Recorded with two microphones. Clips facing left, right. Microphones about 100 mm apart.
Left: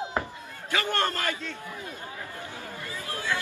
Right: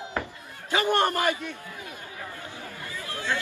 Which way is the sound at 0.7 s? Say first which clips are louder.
Right 4 dB; 20° right (ahead or behind).